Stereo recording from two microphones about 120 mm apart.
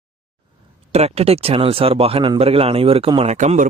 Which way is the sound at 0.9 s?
60° right (ahead or behind).